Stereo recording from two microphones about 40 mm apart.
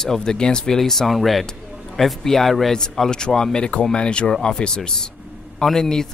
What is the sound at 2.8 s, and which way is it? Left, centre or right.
Speech, centre.